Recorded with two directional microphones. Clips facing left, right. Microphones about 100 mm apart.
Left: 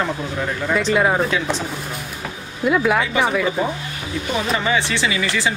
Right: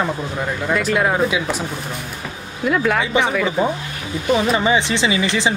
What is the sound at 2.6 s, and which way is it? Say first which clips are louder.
Speech: left 1 dB; 5° left (ahead or behind).